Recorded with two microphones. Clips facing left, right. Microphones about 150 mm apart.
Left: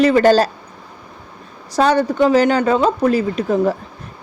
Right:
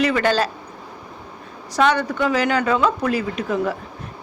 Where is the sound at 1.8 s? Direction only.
35° left (ahead or behind).